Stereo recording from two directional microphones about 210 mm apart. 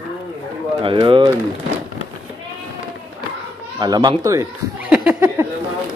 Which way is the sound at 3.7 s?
20° right (ahead or behind).